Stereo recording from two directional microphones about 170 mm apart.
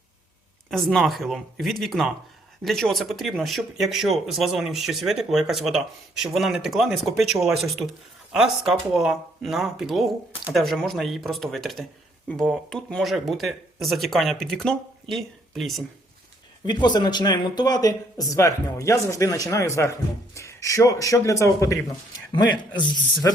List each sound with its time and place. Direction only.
0.7 s speech: centre (ahead or behind)
16.6 s speech: 25° left (ahead or behind)